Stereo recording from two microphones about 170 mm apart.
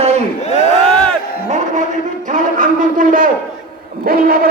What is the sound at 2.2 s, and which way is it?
A man's voice, 50° right (ahead or behind).